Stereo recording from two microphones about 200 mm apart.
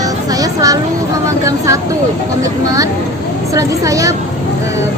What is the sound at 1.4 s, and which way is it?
A woman's voice, 15° right (ahead or behind).